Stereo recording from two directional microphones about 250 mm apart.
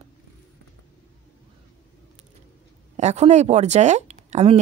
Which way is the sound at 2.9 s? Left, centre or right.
Right.